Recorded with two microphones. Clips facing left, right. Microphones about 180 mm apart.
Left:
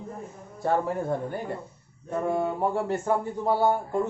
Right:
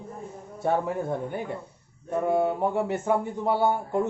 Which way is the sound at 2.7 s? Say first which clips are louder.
Right 1 dB; 20° right (ahead or behind).